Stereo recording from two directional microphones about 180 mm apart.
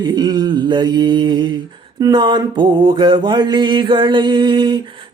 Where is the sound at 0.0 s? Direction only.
25° right (ahead or behind).